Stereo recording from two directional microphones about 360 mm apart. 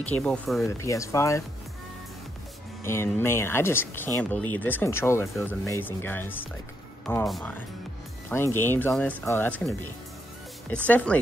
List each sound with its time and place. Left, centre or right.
0.0 s speech: centre
2.8 s speech: centre